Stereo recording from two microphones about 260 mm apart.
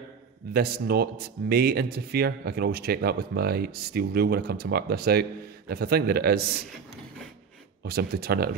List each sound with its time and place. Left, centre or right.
0.5 s speech: right
7.8 s speech: right